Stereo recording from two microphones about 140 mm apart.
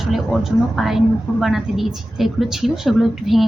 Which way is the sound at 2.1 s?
Centre (ahead or behind).